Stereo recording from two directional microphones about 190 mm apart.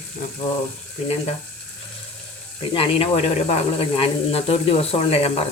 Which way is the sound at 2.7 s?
30° left (ahead or behind).